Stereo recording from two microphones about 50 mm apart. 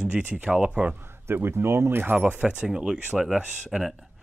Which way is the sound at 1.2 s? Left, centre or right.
Right.